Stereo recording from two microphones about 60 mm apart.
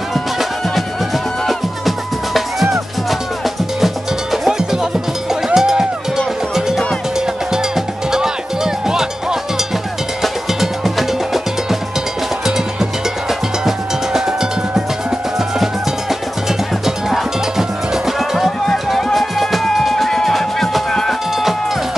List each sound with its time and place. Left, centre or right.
0.1 s music: centre
13.7 s music: centre